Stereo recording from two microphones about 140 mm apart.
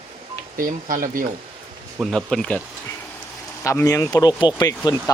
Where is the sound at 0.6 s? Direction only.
75° right (ahead or behind).